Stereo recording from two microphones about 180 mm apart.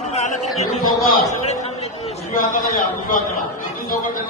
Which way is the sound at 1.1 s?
40° left (ahead or behind).